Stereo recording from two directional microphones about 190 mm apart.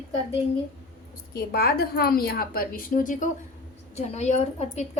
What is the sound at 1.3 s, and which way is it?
A woman's voice, 55° left (ahead or behind).